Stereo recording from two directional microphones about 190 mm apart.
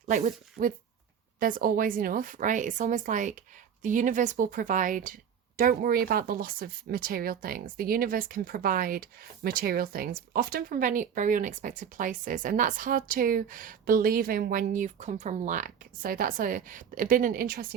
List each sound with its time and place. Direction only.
0.0 s a woman's voice: 40° right (ahead or behind)